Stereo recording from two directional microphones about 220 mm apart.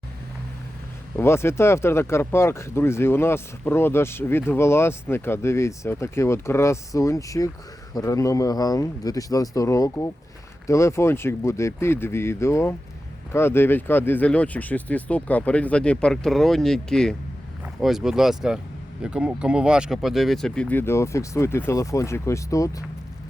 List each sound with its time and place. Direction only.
1.1 s speech: 10° left (ahead or behind)